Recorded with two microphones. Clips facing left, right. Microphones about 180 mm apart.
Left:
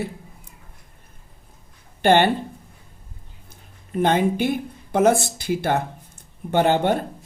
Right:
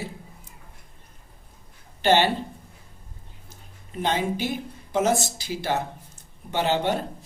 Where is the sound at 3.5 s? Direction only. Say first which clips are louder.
Left 11 dB; 55° left (ahead or behind).